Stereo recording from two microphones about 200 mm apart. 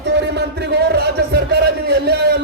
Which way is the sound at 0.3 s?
55° right (ahead or behind).